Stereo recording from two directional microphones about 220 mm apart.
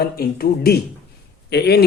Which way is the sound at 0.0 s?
45° left (ahead or behind).